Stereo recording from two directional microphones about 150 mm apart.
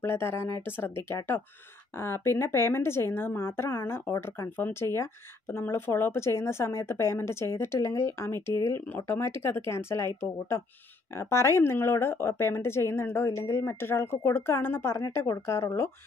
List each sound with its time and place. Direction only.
0.0 s speech: 15° left (ahead or behind)